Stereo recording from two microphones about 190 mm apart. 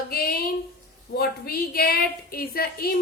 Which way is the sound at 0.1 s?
55° left (ahead or behind).